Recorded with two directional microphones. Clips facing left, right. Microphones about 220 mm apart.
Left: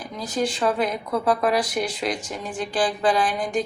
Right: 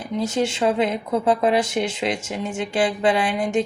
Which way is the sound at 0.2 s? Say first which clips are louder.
Right 3 dB; 25° right (ahead or behind).